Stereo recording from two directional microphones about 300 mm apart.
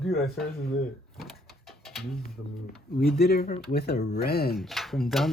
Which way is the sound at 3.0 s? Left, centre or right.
Left.